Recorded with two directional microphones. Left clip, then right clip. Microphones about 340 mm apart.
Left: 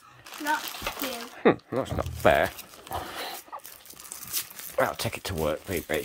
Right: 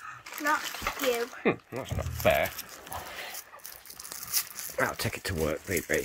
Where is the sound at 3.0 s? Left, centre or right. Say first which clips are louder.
Left 5 dB; centre.